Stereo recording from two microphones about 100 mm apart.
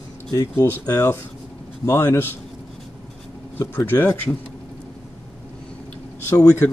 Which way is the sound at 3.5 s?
25° left (ahead or behind).